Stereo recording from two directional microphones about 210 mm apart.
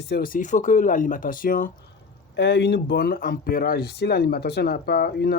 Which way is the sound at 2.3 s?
55° left (ahead or behind).